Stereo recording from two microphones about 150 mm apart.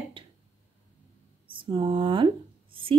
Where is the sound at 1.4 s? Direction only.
35° right (ahead or behind).